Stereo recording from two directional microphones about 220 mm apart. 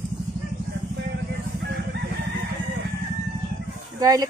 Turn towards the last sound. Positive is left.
turn(degrees=-15)  # may be behind; listen again after turning